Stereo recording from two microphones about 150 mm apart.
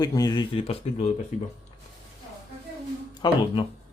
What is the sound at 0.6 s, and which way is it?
Speech, 40° left (ahead or behind).